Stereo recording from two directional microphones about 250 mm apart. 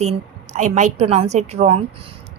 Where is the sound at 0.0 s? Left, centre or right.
Right.